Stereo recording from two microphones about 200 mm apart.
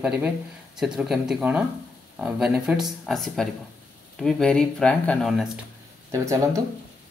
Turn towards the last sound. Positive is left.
turn(degrees=-15)  # may be behind; listen again after turning